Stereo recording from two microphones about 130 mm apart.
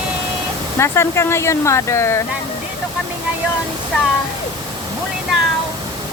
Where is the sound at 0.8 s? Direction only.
20° left (ahead or behind).